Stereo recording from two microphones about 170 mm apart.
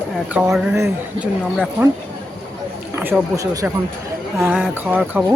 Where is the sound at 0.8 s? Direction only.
15° right (ahead or behind).